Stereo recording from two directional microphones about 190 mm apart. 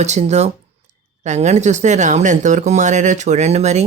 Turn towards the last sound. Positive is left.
turn(degrees=-35)  # may be behind; listen again after turning